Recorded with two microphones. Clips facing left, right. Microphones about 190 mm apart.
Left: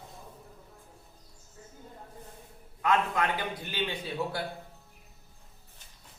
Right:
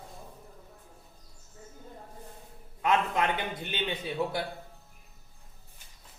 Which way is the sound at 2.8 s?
20° right (ahead or behind).